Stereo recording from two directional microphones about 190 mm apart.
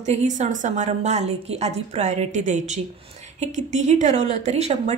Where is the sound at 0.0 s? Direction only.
35° right (ahead or behind).